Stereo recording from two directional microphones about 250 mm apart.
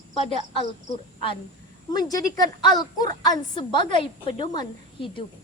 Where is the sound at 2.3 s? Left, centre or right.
Centre.